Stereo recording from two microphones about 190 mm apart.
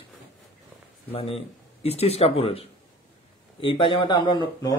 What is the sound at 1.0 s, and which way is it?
Speech, 30° left (ahead or behind).